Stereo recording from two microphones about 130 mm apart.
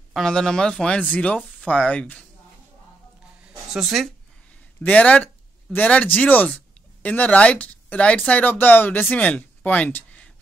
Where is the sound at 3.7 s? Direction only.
Centre (ahead or behind).